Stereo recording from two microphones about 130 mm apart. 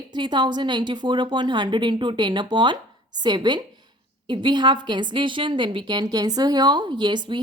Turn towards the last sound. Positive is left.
turn(degrees=-35)  # may be behind; listen again after turning